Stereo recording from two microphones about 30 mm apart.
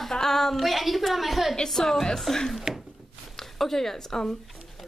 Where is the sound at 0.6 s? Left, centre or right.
Centre.